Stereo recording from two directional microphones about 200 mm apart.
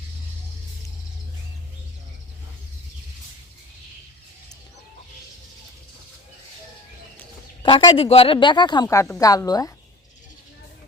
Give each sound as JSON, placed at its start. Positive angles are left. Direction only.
{"t": 7.6, "sound": "a woman's voice", "side_deg": 25}